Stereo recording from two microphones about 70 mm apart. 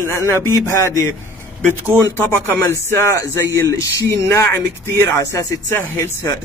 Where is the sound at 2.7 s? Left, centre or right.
Left.